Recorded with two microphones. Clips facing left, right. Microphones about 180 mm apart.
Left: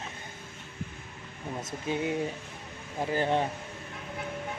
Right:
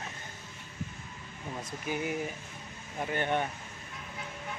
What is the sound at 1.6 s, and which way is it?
Speech, 25° left (ahead or behind).